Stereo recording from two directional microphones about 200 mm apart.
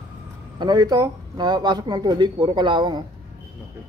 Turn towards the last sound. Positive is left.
turn(degrees=-20)  # may be behind; listen again after turning